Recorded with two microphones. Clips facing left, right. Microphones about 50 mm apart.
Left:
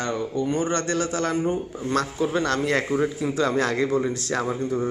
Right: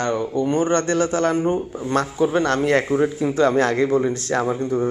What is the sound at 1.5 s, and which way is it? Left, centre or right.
Speech, right.